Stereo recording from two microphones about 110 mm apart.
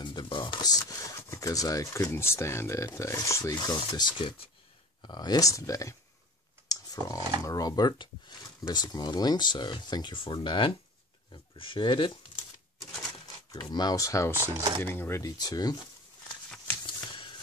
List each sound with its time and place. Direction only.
0.0 s speech: 45° left (ahead or behind)
13.6 s speech: 40° left (ahead or behind)
16.8 s shuffling cards: 45° left (ahead or behind)